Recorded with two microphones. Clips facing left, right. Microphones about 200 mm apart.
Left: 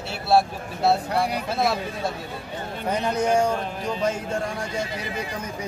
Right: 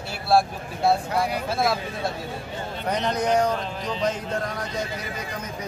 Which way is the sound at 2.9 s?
10° left (ahead or behind).